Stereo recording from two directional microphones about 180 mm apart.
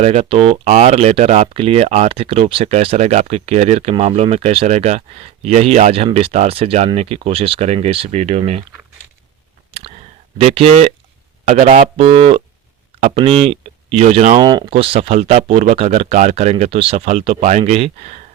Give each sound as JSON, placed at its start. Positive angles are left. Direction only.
{"t": 0.0, "sound": "speech", "side_deg": -35}
{"t": 10.3, "sound": "speech", "side_deg": -35}
{"t": 14.4, "sound": "speech", "side_deg": -25}